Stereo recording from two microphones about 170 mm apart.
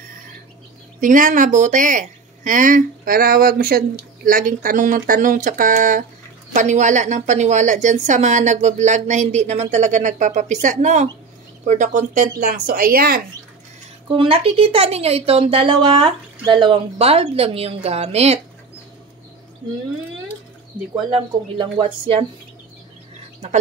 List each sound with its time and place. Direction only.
1.0 s a woman's voice: 50° right (ahead or behind)
14.0 s a woman's voice: 30° right (ahead or behind)
20.9 s a woman's voice: 30° right (ahead or behind)
23.4 s a woman's voice: 40° right (ahead or behind)